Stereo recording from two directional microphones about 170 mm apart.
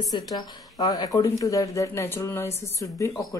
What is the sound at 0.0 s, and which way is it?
Speech, 25° left (ahead or behind).